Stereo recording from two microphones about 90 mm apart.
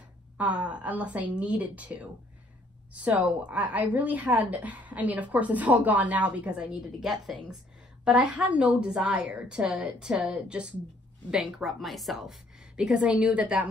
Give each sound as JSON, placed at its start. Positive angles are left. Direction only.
{"t": 0.4, "sound": "a woman's voice", "side_deg": -15}